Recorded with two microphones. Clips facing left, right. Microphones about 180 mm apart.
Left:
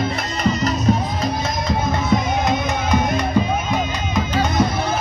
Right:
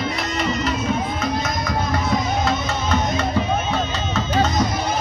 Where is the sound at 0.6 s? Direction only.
40° left (ahead or behind).